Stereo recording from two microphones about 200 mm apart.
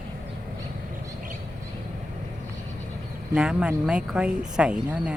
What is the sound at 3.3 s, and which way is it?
Speech, 5° right (ahead or behind).